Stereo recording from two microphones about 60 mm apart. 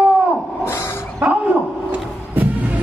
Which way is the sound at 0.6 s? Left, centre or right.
Left.